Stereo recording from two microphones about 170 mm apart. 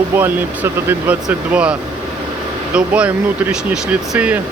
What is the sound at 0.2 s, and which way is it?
Speech, 10° right (ahead or behind).